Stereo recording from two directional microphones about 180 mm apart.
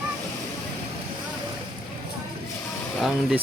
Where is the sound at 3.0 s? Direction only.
Centre (ahead or behind).